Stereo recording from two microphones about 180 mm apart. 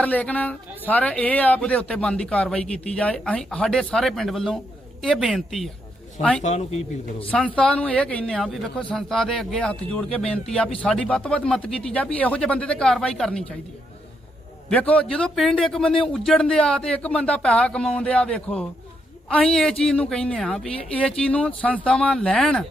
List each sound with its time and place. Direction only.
0.0 s a man's voice: 10° left (ahead or behind)
6.4 s speech: 40° left (ahead or behind)
7.3 s a man's voice: 5° left (ahead or behind)
14.7 s a man's voice: 5° left (ahead or behind)